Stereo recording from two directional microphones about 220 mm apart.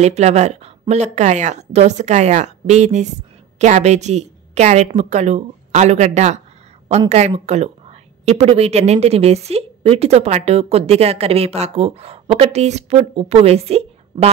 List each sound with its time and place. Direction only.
0.0 s a woman's voice: 30° right (ahead or behind)